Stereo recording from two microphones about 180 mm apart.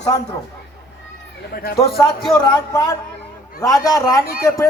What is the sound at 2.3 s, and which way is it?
A man's voice, 15° left (ahead or behind).